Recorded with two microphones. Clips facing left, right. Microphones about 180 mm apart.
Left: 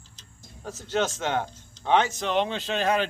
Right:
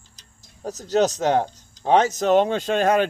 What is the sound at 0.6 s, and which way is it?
Speech, 40° right (ahead or behind).